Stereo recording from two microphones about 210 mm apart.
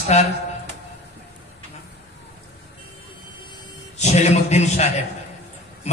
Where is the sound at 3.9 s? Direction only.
30° left (ahead or behind).